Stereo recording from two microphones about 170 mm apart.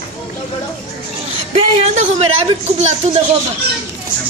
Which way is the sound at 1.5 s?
40° right (ahead or behind).